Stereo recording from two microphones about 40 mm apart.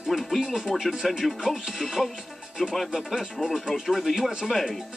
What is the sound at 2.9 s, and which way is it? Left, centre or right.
Speech, centre.